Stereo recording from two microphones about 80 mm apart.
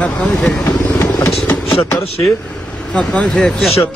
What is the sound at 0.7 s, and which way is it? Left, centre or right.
Vehicle, left.